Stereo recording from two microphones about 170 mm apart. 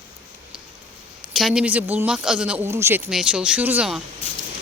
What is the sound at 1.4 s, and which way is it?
Speech, 5° right (ahead or behind).